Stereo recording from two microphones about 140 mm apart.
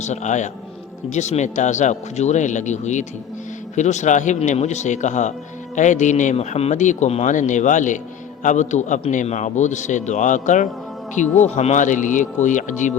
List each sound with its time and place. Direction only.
0.0 s speech: 55° left (ahead or behind)